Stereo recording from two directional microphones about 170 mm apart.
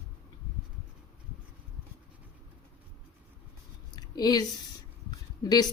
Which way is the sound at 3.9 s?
25° left (ahead or behind).